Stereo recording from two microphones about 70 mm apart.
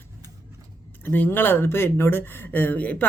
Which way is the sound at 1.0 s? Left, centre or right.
Left.